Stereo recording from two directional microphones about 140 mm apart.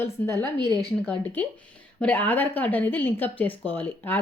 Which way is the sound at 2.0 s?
10° left (ahead or behind).